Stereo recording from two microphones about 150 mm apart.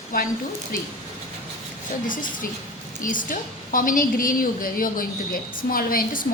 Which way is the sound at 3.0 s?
65° left (ahead or behind).